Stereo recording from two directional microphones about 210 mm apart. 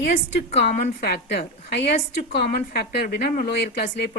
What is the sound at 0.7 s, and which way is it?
A woman's voice, 45° left (ahead or behind).